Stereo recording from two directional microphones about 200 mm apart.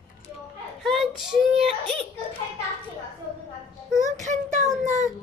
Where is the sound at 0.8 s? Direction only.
Centre (ahead or behind).